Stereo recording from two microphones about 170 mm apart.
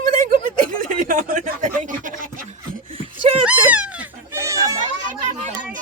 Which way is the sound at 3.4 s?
5° right (ahead or behind).